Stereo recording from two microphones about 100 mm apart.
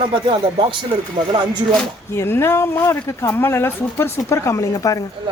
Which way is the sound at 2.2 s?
25° left (ahead or behind).